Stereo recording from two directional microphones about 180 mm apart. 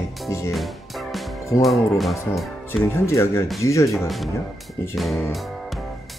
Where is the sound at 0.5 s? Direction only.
Centre (ahead or behind).